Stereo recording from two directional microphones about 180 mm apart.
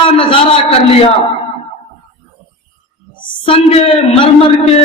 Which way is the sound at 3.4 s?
30° left (ahead or behind).